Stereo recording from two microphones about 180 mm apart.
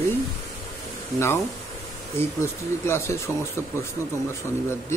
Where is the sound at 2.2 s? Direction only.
15° left (ahead or behind).